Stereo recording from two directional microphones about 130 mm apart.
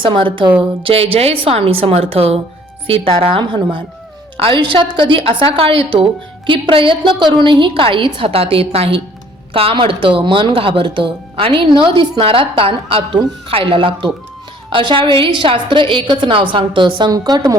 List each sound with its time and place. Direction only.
0.0 s a woman's voice: 40° right (ahead or behind)